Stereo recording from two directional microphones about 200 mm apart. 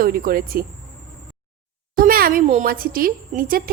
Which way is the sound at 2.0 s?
45° right (ahead or behind).